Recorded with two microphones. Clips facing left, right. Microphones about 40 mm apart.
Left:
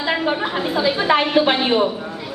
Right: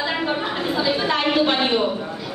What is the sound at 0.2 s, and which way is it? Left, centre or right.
A woman's voice, centre.